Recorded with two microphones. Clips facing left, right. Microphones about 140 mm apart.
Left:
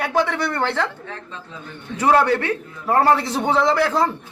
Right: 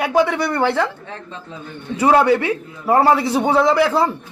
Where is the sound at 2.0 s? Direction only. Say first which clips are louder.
Right 3 dB; 10° right (ahead or behind).